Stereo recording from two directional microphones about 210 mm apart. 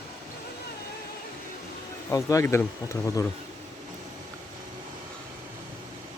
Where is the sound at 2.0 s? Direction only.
15° left (ahead or behind).